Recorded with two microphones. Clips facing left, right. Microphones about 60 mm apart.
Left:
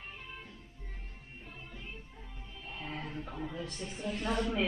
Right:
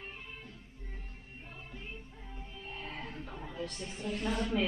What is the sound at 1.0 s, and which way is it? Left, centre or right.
Music, right.